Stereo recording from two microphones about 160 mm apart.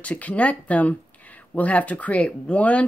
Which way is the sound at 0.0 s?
10° left (ahead or behind).